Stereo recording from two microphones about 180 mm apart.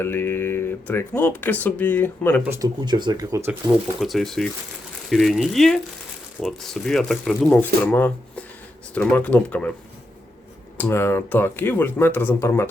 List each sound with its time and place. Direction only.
0.0 s speech: 10° left (ahead or behind)
2.4 s speech: 15° right (ahead or behind)
4.0 s speech: centre (ahead or behind)
10.8 s speech: 10° left (ahead or behind)